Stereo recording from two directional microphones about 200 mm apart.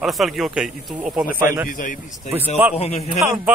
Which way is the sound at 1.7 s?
40° left (ahead or behind).